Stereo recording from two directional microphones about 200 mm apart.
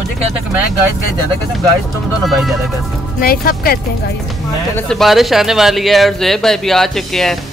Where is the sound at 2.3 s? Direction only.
Centre (ahead or behind).